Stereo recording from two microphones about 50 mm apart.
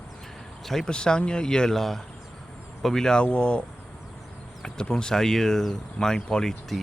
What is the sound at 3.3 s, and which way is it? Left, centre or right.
Speech, left.